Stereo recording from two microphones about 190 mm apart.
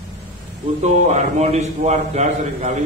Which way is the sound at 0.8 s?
35° right (ahead or behind).